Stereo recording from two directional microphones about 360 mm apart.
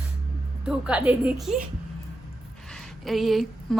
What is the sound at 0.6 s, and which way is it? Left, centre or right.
Speech, centre.